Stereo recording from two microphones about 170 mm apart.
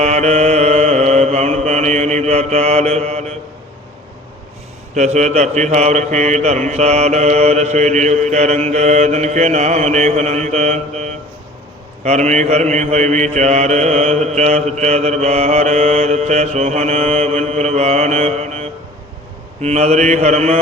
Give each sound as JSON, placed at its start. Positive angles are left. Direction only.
{"t": 0.0, "sound": "mantra", "side_deg": -40}
{"t": 4.9, "sound": "speech", "side_deg": -45}
{"t": 12.0, "sound": "mantra", "side_deg": -40}